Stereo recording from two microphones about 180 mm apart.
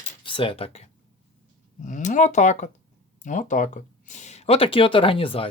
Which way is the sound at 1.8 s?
45° left (ahead or behind).